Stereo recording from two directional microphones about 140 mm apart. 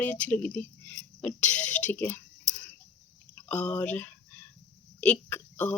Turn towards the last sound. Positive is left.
turn(degrees=10)  # may be behind; listen again after turning